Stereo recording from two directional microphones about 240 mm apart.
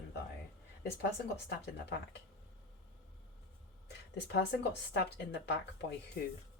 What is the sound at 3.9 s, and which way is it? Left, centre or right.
Speech, left.